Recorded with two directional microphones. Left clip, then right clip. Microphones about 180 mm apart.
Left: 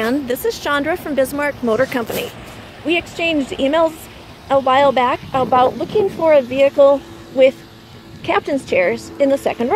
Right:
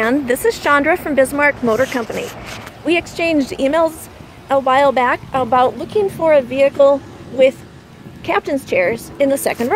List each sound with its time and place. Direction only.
0.0 s speech: centre (ahead or behind)
2.9 s a woman's voice: 5° right (ahead or behind); by 9.8 s 20° left (ahead or behind)